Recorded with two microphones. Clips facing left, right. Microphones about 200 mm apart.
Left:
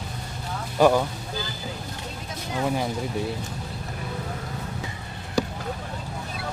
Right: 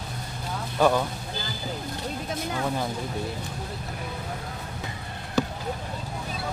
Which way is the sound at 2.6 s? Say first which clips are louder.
Left 5 dB; 10° left (ahead or behind).